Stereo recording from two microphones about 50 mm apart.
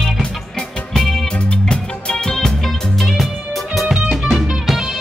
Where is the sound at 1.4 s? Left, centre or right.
Left; by 3.9 s centre.